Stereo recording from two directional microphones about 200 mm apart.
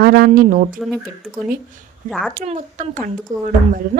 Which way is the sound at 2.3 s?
35° right (ahead or behind).